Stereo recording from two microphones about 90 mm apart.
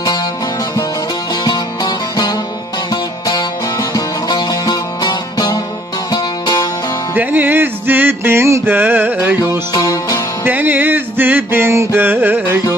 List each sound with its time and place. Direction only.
1.3 s music: 50° left (ahead or behind)
7.1 s music: 20° right (ahead or behind)
9.7 s music: 40° left (ahead or behind)
10.4 s music: 20° right (ahead or behind)